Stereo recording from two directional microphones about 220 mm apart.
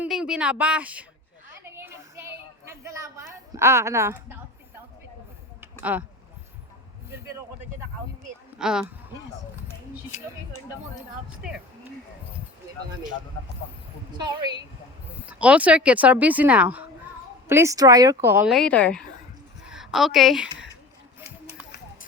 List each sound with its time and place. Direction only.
0.0 s a woman's voice: 5° right (ahead or behind)
1.6 s a sound: 10° right (ahead or behind)
5.8 s a woman's voice: 5° right (ahead or behind)
8.5 s speech: 5° right (ahead or behind)
9.9 s a woman's voice: 5° right (ahead or behind)
15.3 s a woman's voice: 5° right (ahead or behind)
21.2 s a sound: 10° right (ahead or behind)